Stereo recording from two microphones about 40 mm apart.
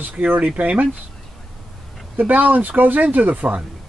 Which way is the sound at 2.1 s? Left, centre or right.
Right.